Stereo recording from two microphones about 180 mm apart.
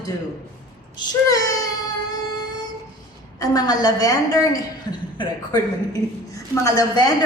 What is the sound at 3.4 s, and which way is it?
A man's voice, 20° left (ahead or behind).